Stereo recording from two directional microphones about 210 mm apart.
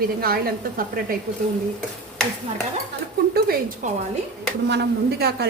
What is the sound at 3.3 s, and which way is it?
A woman's voice, 45° right (ahead or behind).